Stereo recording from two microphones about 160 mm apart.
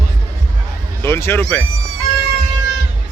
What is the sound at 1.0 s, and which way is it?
Speech, 15° left (ahead or behind).